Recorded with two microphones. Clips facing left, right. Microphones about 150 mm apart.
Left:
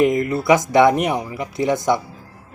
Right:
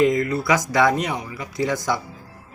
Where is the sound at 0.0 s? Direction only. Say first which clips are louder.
Left 2 dB; 20° left (ahead or behind).